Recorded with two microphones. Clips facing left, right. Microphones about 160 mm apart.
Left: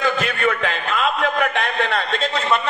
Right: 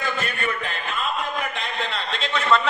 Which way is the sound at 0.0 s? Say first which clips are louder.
Left 7 dB; 90° left.